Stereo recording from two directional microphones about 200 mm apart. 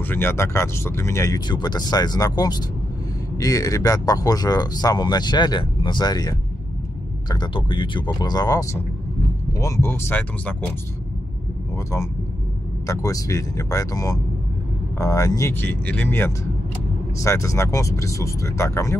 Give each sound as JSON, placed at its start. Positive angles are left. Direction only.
{"t": 0.0, "sound": "speech", "side_deg": 10}
{"t": 12.8, "sound": "speech", "side_deg": 15}